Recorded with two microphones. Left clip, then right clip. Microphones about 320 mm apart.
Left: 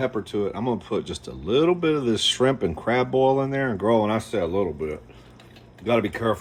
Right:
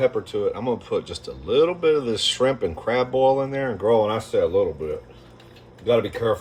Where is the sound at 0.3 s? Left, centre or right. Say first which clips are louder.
Right 2 dB; left.